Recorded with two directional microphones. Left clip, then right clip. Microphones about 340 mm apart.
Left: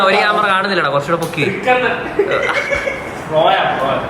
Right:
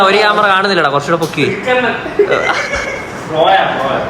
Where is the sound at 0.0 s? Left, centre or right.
Centre.